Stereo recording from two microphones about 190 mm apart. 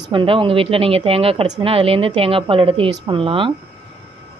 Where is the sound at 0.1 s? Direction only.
25° right (ahead or behind).